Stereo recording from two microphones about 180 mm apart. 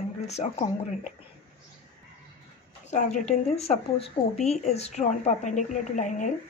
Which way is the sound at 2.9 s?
40° left (ahead or behind).